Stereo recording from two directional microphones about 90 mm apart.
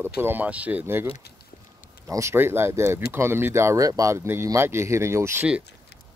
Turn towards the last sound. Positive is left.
turn(degrees=-30)  # may be behind; listen again after turning